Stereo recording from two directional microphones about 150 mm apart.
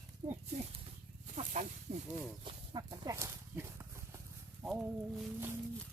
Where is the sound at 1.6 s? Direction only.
50° right (ahead or behind).